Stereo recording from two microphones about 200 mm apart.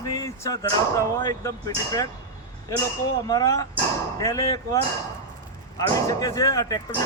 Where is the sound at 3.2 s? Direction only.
20° left (ahead or behind).